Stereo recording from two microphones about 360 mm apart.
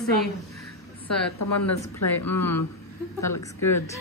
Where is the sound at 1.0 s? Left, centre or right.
Left.